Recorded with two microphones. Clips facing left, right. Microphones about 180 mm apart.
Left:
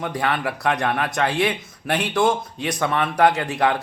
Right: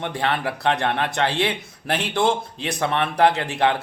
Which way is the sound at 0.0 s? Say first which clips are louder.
Even; 30° right (ahead or behind).